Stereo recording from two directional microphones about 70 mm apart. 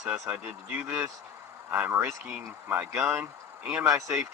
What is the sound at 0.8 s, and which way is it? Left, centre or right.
Speech, centre.